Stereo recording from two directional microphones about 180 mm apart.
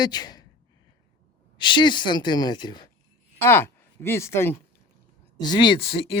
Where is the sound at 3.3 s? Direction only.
15° left (ahead or behind).